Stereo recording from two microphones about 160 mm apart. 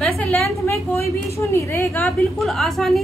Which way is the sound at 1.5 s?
15° left (ahead or behind).